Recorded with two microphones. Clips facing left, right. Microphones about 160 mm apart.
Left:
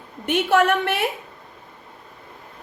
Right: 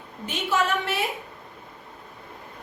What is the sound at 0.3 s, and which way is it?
Speech, 60° left (ahead or behind).